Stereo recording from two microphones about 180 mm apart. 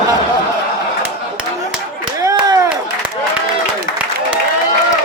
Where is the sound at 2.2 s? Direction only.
20° right (ahead or behind).